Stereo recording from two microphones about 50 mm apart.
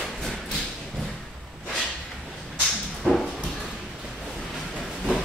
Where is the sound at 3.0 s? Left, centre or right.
Centre.